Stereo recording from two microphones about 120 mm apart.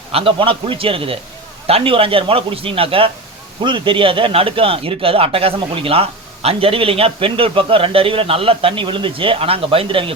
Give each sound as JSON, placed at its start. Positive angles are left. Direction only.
{"t": 0.1, "sound": "a man's voice", "side_deg": -50}